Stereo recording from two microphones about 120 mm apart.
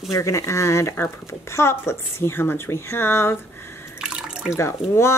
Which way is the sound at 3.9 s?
5° right (ahead or behind).